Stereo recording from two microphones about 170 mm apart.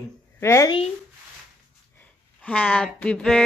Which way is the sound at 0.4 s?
15° left (ahead or behind).